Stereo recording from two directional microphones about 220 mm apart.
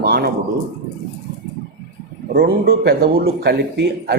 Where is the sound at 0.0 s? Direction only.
50° right (ahead or behind).